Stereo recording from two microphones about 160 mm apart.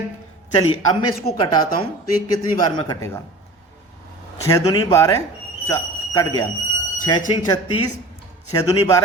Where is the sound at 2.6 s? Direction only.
25° left (ahead or behind).